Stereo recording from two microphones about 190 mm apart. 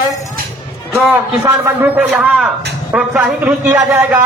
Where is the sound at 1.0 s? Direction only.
15° right (ahead or behind).